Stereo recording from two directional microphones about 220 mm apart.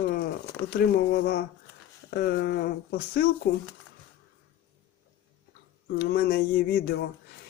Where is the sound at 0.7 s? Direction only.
45° left (ahead or behind).